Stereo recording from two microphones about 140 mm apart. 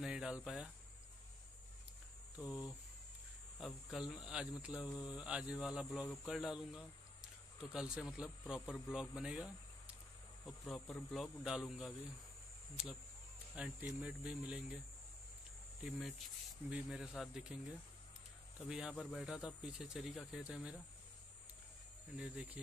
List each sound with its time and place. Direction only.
0.0 s speech: 5° right (ahead or behind)
2.3 s speech: 5° right (ahead or behind)
13.6 s speech: 10° right (ahead or behind)
15.8 s speech: centre (ahead or behind)
18.7 s speech: 5° right (ahead or behind)
22.1 s speech: 5° right (ahead or behind)